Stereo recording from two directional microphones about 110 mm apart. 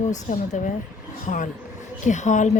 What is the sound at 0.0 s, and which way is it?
Speech, 90° left.